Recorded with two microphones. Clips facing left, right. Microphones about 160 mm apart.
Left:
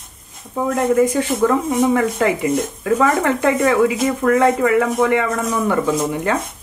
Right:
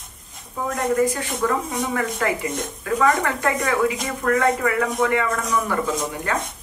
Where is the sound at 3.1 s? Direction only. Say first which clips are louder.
Left 4 dB; 25° left (ahead or behind).